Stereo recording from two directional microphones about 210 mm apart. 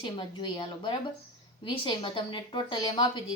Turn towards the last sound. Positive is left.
turn(degrees=25)  # may be behind; listen again after turning